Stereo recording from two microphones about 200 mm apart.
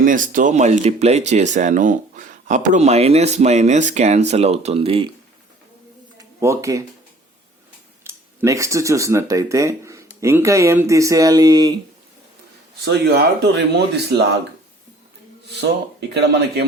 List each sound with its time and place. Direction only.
0.0 s speech: 40° right (ahead or behind)
6.1 s a sound: 15° right (ahead or behind)
8.0 s speech: 15° right (ahead or behind)
13.4 s speech: 55° right (ahead or behind)
15.4 s speech: 55° right (ahead or behind)